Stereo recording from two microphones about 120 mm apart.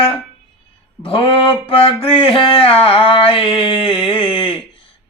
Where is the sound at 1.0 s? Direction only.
50° left (ahead or behind).